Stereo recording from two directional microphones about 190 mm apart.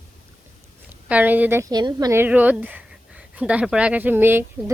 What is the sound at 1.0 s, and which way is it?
A woman's voice, 10° right (ahead or behind).